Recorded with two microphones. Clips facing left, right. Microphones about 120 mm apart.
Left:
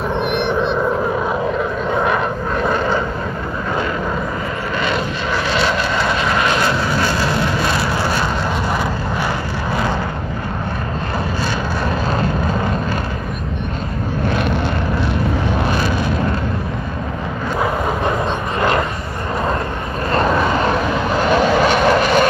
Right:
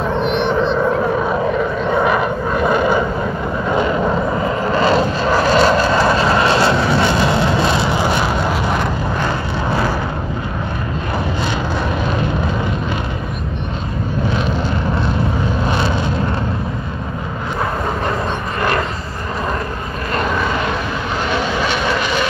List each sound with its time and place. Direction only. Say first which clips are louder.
0.2 s a sound: right 2 dB; 60° left (ahead or behind)
1.9 s vehicle: right 2 dB; 5° right (ahead or behind)
4.7 s vehicle: right 6 dB; 35° right (ahead or behind); by 8.3 s 20° right (ahead or behind)
21.3 s vehicle: left 6 dB; 45° left (ahead or behind)